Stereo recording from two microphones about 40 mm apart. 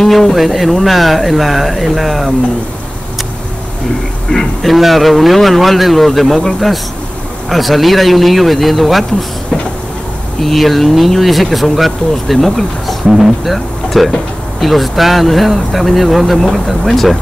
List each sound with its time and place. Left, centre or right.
0.0 s speech: centre
4.3 s speech: centre
10.4 s speech: centre
13.0 s speech: centre
13.5 s speech: centre